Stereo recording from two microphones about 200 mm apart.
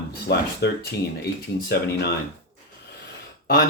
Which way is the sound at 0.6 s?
60° left (ahead or behind).